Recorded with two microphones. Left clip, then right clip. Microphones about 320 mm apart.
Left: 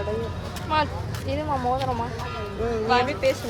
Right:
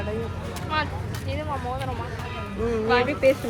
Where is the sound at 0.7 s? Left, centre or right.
Centre.